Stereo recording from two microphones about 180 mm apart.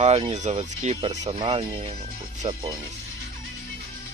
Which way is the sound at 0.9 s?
25° right (ahead or behind).